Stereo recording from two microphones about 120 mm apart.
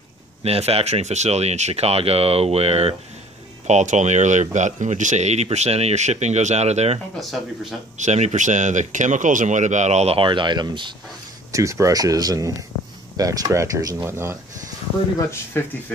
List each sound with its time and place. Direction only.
0.4 s speech: 55° right (ahead or behind)
3.6 s speech: 85° right; by 7.0 s 65° right (ahead or behind)
7.2 s speech: centre (ahead or behind)
8.0 s speech: 70° right (ahead or behind)
10.1 s speech: 40° right (ahead or behind)
11.5 s speech: 25° right (ahead or behind)
15.5 s speech: 20° left (ahead or behind)